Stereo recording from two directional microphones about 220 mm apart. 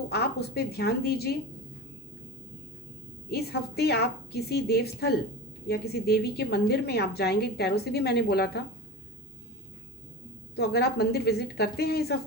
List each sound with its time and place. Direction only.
0.1 s a woman's voice: 45° left (ahead or behind)
3.2 s a woman's voice: 45° left (ahead or behind)
10.5 s a woman's voice: 45° left (ahead or behind)